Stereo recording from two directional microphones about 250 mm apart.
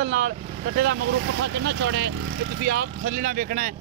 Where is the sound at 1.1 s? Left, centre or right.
Right.